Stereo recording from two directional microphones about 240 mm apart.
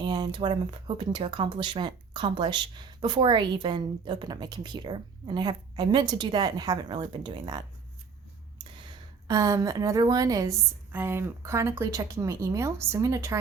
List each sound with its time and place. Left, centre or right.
0.0 s speech: centre
9.2 s a woman's voice: centre